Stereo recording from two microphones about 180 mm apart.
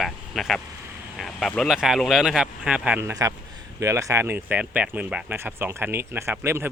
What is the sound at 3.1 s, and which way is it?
Speech, 20° right (ahead or behind).